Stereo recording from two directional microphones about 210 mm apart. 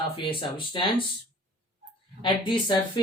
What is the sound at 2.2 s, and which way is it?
Speech, 20° left (ahead or behind).